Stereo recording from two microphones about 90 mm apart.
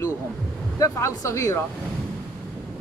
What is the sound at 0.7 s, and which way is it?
Speech, 35° left (ahead or behind).